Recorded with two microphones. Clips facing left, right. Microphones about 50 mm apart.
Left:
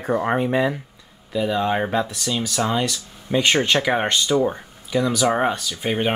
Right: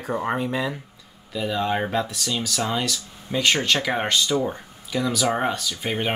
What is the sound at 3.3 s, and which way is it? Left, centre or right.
Speech, centre.